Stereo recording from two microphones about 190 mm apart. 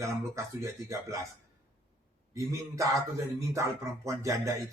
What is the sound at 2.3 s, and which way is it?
Speech, 15° right (ahead or behind).